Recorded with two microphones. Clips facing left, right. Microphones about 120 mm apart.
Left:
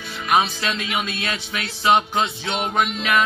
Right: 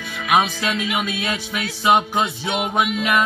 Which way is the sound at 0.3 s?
10° right (ahead or behind).